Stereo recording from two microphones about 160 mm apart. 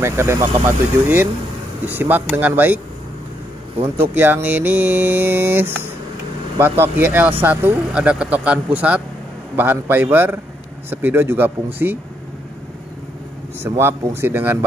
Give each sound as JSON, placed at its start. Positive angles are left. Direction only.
{"t": 0.0, "sound": "speech", "side_deg": -15}
{"t": 3.8, "sound": "speech", "side_deg": -15}
{"t": 13.6, "sound": "speech", "side_deg": -15}